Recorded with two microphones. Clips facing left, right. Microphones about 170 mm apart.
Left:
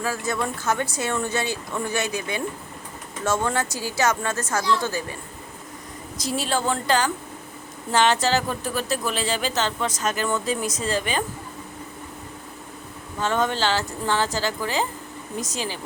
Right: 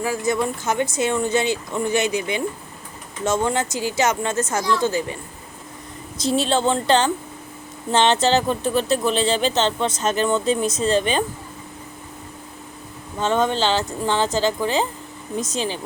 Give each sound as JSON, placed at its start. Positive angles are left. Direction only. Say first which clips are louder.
{"t": 0.0, "sound": "speech", "louder": "right 4 dB", "side_deg": -15}
{"t": 6.1, "sound": "speech", "louder": "right 6 dB", "side_deg": -25}
{"t": 13.1, "sound": "speech", "louder": "right 3 dB", "side_deg": -20}